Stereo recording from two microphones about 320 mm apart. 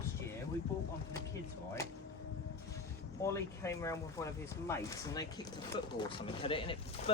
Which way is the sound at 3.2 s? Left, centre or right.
Centre.